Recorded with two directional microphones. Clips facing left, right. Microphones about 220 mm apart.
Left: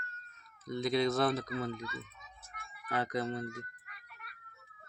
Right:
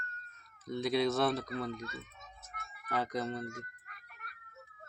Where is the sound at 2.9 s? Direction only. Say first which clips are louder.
Left 1 dB; centre (ahead or behind).